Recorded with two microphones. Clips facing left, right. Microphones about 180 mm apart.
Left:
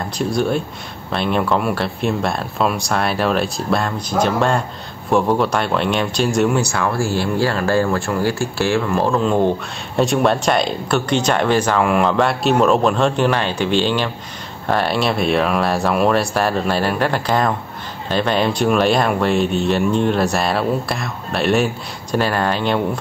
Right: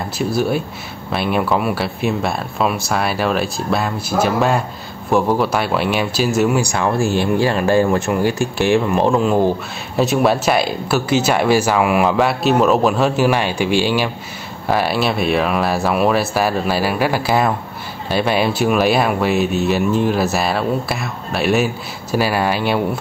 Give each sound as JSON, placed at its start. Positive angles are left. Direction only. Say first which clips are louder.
{"t": 0.2, "sound": "speech", "louder": "even", "side_deg": -5}
{"t": 6.6, "sound": "speech", "louder": "right 2 dB", "side_deg": -20}